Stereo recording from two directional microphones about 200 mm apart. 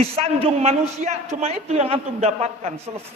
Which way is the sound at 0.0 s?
30° right (ahead or behind).